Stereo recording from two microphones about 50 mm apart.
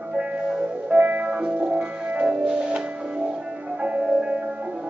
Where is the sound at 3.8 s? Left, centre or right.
Right.